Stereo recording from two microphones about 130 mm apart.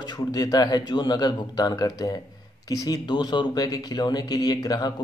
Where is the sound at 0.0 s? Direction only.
30° left (ahead or behind).